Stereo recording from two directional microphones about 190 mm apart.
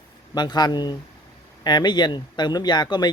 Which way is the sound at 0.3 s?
20° left (ahead or behind).